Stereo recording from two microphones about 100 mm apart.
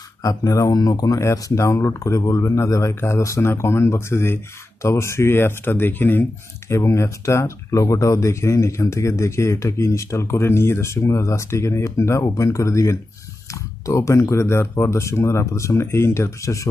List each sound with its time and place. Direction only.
0.2 s speech: 40° left (ahead or behind)